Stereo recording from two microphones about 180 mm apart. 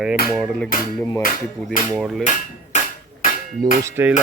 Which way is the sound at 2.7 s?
40° left (ahead or behind).